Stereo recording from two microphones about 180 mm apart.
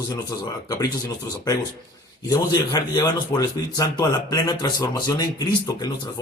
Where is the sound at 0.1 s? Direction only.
20° left (ahead or behind).